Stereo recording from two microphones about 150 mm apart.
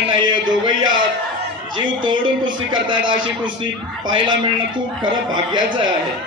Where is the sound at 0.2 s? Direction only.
30° right (ahead or behind).